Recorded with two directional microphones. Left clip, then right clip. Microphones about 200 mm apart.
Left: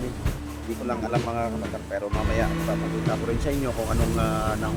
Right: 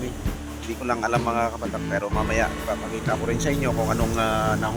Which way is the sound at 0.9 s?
5° right (ahead or behind).